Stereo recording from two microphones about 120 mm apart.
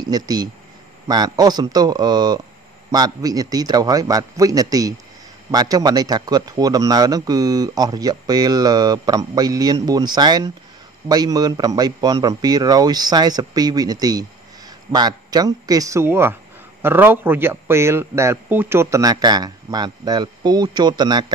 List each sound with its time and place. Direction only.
0.1 s a man's voice: 35° right (ahead or behind)